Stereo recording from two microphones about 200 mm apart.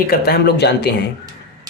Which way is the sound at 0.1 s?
50° left (ahead or behind).